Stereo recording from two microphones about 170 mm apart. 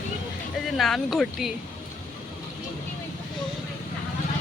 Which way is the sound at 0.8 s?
Centre (ahead or behind).